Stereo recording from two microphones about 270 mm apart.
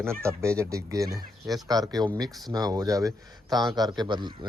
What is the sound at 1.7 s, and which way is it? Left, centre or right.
Speech, centre.